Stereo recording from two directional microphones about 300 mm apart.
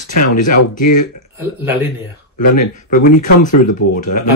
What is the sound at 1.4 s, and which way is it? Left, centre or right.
Speech, centre.